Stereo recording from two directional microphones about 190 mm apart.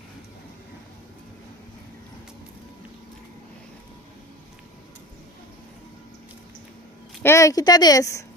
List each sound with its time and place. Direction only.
7.2 s speech: 15° left (ahead or behind)